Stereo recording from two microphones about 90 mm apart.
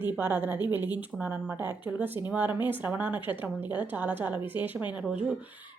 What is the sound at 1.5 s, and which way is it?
Speech, 25° right (ahead or behind).